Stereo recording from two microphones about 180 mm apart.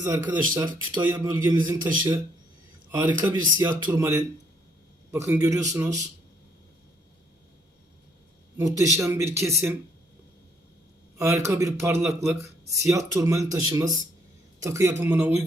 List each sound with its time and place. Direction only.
0.0 s a man's voice: 20° right (ahead or behind)
8.5 s a man's voice: 20° right (ahead or behind)
11.4 s a man's voice: 15° right (ahead or behind)